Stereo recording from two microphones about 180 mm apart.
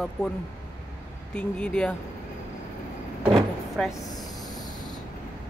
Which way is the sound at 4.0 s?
20° left (ahead or behind).